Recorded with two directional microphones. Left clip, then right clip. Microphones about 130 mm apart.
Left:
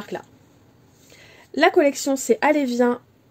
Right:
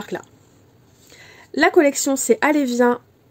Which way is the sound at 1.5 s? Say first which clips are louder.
Right 2 dB; 30° right (ahead or behind).